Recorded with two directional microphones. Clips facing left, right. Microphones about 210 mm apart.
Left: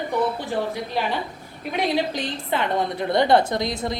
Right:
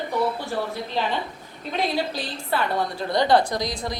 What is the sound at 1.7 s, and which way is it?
A woman's voice, 20° left (ahead or behind).